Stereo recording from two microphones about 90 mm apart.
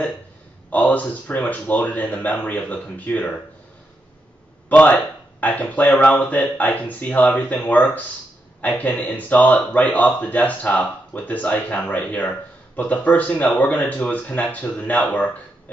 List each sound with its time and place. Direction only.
0.7 s speech: 20° left (ahead or behind)
4.6 s speech: 20° left (ahead or behind)